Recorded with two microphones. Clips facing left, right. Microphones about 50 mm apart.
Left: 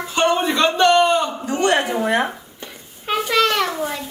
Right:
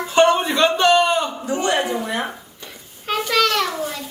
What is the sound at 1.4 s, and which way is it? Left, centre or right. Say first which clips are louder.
Speech: left 2 dB; left.